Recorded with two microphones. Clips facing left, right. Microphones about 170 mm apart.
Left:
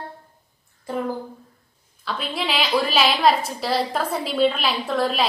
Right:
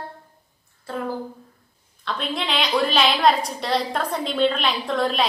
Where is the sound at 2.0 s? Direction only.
5° left (ahead or behind).